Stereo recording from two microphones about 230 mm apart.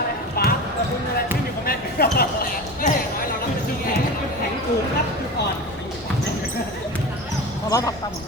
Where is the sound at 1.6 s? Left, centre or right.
Left.